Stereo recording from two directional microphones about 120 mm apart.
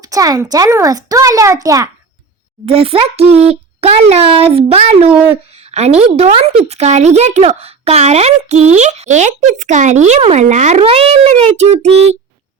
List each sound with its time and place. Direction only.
0.1 s a child's voice: 30° right (ahead or behind)
2.6 s a child's voice: 50° right (ahead or behind); by 10.8 s 75° right (ahead or behind)
10.8 s a child's voice: 55° right (ahead or behind)